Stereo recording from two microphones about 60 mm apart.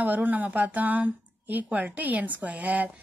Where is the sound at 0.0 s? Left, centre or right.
Right.